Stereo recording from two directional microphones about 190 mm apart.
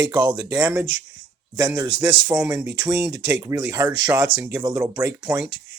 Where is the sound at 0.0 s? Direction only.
25° right (ahead or behind).